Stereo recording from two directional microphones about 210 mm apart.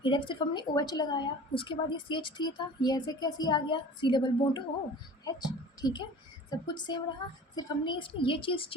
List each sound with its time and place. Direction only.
0.0 s a woman's voice: 20° left (ahead or behind)